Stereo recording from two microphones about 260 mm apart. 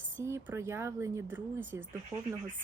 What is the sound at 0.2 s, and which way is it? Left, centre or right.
Speech, centre.